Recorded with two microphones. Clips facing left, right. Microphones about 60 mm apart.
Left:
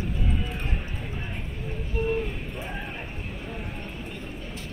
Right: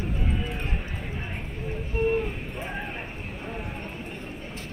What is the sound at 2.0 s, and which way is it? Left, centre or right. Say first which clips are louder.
Vehicle: right 2 dB; right.